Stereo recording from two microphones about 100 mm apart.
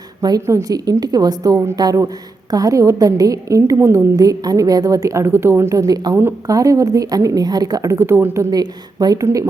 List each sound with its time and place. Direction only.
0.2 s a woman's voice: 40° right (ahead or behind)
8.4 s a woman's voice: 40° right (ahead or behind)
9.2 s speech: 30° right (ahead or behind)